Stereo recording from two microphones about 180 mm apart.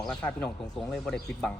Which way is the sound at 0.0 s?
5° left (ahead or behind).